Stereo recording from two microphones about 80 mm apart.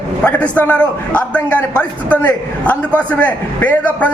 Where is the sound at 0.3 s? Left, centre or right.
Centre.